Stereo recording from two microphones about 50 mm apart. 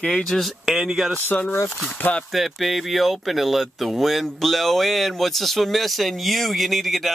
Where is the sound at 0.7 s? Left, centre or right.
Centre.